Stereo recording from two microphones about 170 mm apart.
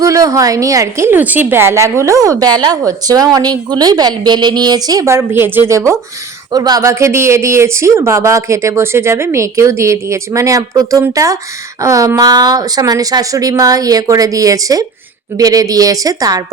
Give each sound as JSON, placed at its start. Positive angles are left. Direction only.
{"t": 0.0, "sound": "a woman's voice", "side_deg": -20}